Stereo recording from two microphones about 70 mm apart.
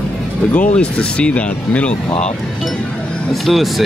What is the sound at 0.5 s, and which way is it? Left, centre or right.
Speech, centre.